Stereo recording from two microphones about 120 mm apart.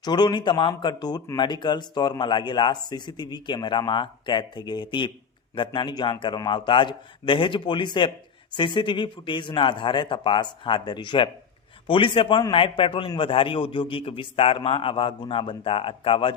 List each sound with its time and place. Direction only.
0.0 s a man's voice: 35° left (ahead or behind)